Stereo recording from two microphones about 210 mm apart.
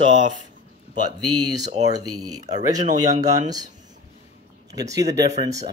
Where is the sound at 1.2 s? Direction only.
90° right.